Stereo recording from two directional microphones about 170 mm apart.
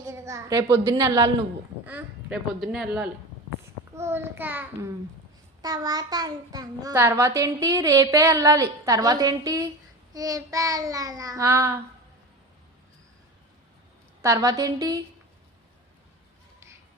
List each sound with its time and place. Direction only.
0.0 s a woman's voice: 20° right (ahead or behind)
1.8 s speech: 10° right (ahead or behind)
3.9 s a child's voice: 15° right (ahead or behind)
14.2 s a child's voice: 20° right (ahead or behind)